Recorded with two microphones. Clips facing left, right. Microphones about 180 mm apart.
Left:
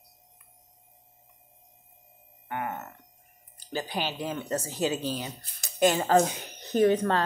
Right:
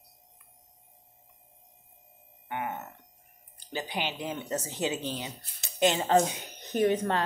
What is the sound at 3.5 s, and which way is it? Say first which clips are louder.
Speech: left 2 dB; 20° right (ahead or behind).